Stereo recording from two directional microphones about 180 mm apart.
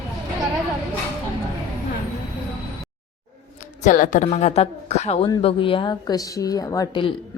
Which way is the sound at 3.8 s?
45° left (ahead or behind).